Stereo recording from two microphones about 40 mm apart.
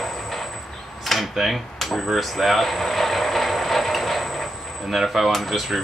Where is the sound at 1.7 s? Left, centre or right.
Centre.